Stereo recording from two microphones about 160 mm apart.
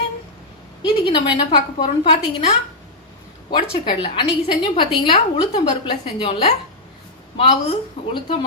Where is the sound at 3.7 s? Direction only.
30° left (ahead or behind).